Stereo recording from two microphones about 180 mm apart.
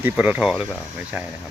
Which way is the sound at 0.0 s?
10° right (ahead or behind).